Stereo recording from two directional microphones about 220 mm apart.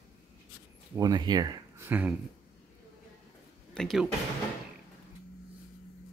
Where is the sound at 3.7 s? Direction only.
Centre (ahead or behind).